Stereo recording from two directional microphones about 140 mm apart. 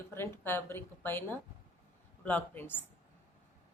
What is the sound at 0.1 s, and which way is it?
Speech, 15° left (ahead or behind).